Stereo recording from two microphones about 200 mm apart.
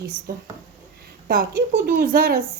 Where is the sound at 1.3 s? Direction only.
45° right (ahead or behind).